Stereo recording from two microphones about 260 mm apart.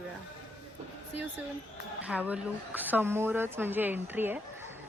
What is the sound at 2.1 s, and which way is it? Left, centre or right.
A woman's voice, centre.